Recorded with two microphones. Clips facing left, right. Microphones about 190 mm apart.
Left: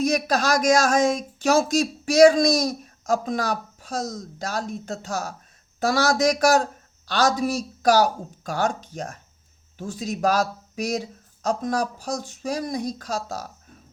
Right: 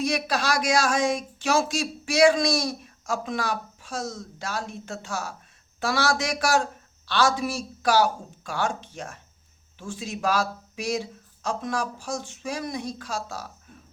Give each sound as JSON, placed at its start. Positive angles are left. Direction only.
{"t": 0.0, "sound": "speech", "side_deg": 40}